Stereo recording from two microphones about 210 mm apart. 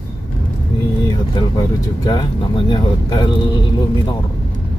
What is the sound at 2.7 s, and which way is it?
Speech, 20° left (ahead or behind).